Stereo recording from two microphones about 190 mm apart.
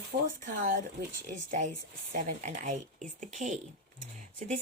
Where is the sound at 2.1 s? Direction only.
40° right (ahead or behind).